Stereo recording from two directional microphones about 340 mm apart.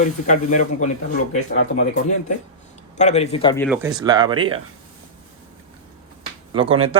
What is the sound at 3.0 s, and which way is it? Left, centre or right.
Speech, centre.